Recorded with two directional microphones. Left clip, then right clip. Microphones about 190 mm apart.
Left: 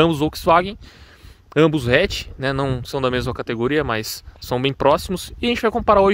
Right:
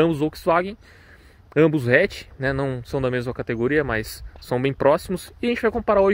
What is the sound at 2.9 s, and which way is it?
Speech, 25° left (ahead or behind).